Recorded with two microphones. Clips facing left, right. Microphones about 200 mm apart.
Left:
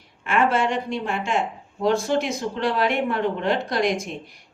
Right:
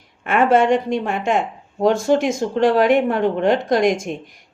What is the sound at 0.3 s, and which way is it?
Speech, 50° right (ahead or behind).